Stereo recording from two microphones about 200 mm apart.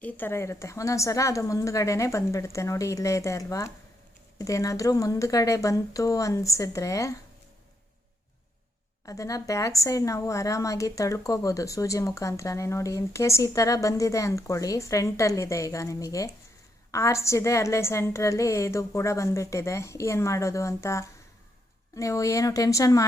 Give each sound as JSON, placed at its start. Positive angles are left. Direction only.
{"t": 0.0, "sound": "a woman's voice", "side_deg": 10}
{"t": 9.0, "sound": "a woman's voice", "side_deg": 15}